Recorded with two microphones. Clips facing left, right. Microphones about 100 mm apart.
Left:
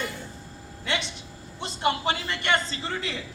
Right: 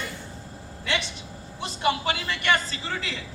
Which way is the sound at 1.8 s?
25° left (ahead or behind).